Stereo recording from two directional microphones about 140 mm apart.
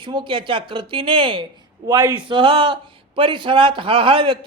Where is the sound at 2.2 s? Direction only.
35° right (ahead or behind).